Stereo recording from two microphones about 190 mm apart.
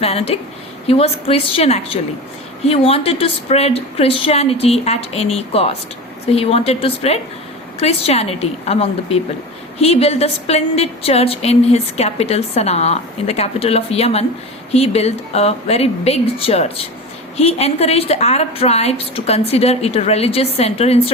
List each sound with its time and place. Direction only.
0.0 s a woman's voice: 30° left (ahead or behind)